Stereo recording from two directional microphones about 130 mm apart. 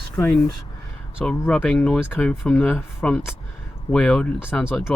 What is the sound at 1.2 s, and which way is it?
Speech, 10° left (ahead or behind).